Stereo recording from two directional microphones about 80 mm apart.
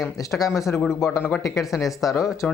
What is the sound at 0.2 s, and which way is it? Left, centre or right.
Speech, left.